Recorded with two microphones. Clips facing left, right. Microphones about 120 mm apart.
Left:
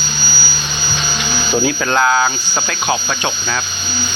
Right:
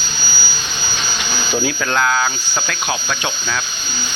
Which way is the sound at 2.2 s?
20° left (ahead or behind).